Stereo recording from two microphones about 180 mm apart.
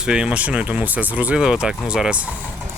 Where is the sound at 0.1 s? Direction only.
5° right (ahead or behind).